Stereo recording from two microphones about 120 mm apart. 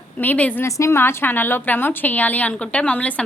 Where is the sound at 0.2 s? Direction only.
15° left (ahead or behind).